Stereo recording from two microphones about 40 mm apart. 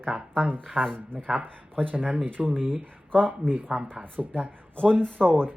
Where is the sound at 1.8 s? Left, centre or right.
Right.